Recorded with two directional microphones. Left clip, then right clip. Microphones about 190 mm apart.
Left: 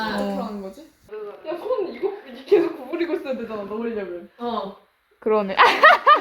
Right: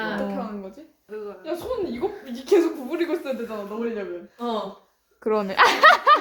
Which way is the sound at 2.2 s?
10° right (ahead or behind).